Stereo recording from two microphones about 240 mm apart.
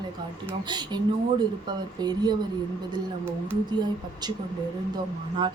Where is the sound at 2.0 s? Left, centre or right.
Centre.